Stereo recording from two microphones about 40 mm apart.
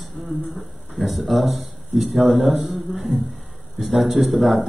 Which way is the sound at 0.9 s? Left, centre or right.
Centre.